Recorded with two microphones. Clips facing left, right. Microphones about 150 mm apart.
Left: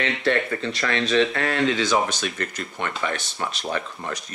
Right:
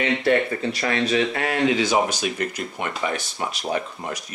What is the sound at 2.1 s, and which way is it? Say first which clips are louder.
Speech: right 3 dB; 10° right (ahead or behind).